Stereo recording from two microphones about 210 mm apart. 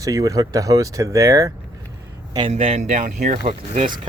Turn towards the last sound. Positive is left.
turn(degrees=-35)  # may be behind; listen again after turning